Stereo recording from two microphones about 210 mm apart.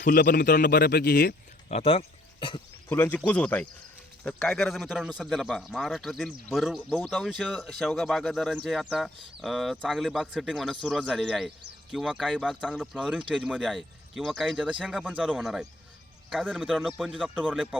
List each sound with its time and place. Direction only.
0.0 s a man's voice: 45° left (ahead or behind)
1.7 s speech: 30° left (ahead or behind)
2.9 s speech: 10° left (ahead or behind)